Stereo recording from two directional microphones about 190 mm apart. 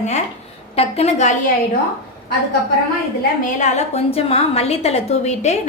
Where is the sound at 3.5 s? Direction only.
35° left (ahead or behind).